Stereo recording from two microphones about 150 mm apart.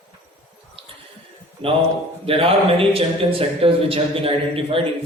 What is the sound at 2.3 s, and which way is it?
Speech, 40° right (ahead or behind).